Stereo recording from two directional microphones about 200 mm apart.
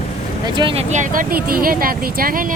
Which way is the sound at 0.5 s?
30° right (ahead or behind).